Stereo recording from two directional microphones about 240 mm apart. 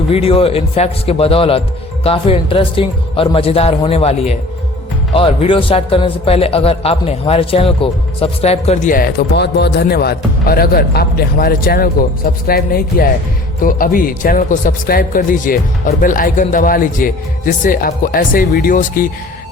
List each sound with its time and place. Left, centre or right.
0.1 s speech: left